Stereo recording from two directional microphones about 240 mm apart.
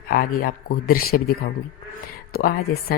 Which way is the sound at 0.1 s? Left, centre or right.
Left.